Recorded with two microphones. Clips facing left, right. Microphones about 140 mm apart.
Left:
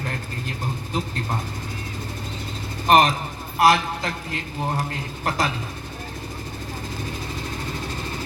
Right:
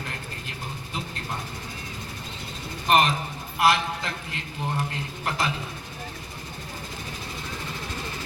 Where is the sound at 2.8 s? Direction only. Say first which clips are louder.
Left 4 dB; 40° left (ahead or behind).